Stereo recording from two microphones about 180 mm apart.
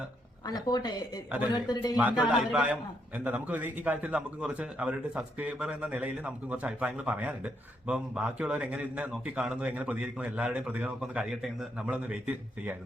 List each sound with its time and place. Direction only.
0.4 s speech: 20° left (ahead or behind)
2.2 s a man's voice: 5° right (ahead or behind)